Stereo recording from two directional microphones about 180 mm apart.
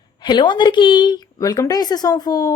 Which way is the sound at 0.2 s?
25° left (ahead or behind).